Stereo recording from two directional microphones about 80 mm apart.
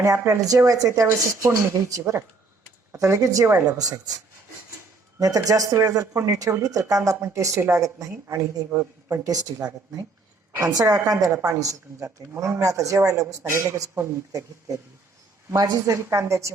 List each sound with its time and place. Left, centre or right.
0.0 s a man's voice: right
5.2 s a man's voice: right
15.5 s speech: right
16.0 s a man's voice: right